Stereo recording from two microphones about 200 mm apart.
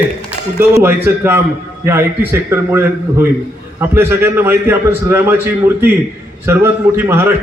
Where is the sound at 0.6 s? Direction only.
10° right (ahead or behind).